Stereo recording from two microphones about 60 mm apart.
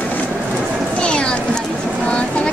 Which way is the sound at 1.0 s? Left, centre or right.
Centre.